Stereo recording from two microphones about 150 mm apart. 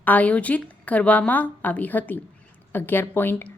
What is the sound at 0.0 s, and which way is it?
A woman's voice, 10° left (ahead or behind).